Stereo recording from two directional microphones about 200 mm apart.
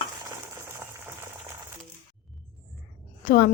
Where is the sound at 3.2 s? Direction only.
45° left (ahead or behind).